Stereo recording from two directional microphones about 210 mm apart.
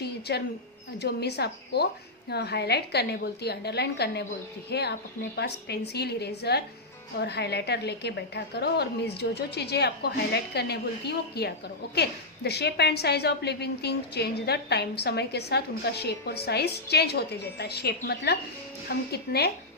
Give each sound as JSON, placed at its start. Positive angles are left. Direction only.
{"t": 0.3, "sound": "a woman's voice", "side_deg": 55}